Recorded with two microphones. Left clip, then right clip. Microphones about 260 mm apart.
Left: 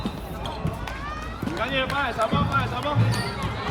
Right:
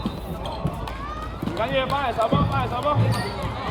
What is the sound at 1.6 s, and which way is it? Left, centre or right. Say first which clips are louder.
Speech: right 2 dB; right.